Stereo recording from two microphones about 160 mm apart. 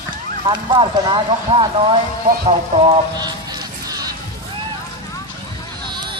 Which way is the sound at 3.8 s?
25° right (ahead or behind).